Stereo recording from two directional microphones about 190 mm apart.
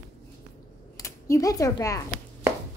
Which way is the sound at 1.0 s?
15° left (ahead or behind).